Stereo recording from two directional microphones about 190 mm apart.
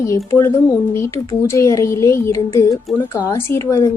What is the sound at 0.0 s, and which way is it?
Speech, 15° left (ahead or behind).